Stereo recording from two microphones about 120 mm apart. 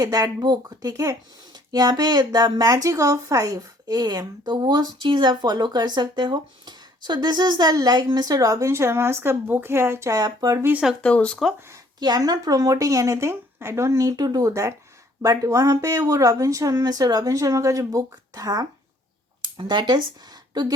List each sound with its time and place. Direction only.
0.0 s a woman's voice: 30° right (ahead or behind)
10.6 s speech: 15° right (ahead or behind)
11.0 s speech: 10° left (ahead or behind)
11.7 s speech: 35° right (ahead or behind)
19.4 s a sound: 40° right (ahead or behind)
20.5 s speech: 35° right (ahead or behind)